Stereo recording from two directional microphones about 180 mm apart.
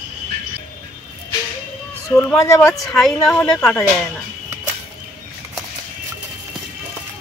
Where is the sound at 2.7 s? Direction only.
Centre (ahead or behind).